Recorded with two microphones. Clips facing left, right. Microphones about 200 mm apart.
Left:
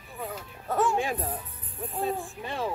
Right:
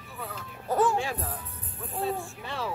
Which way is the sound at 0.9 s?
15° left (ahead or behind).